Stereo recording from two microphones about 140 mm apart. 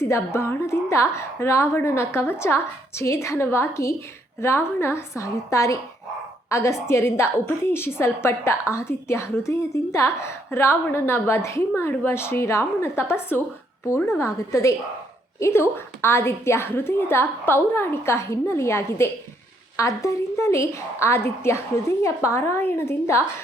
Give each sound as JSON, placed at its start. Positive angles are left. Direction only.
{"t": 0.0, "sound": "a woman's voice", "side_deg": 20}